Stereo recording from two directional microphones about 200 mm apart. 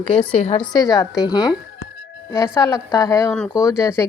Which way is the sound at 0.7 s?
20° left (ahead or behind).